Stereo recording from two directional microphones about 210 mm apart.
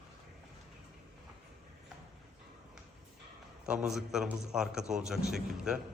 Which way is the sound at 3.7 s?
Centre (ahead or behind).